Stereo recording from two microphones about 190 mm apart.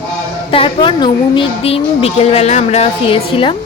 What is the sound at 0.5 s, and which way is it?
A woman's voice, 25° left (ahead or behind).